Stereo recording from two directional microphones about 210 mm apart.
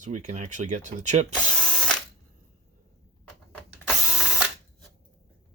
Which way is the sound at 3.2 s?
5° left (ahead or behind).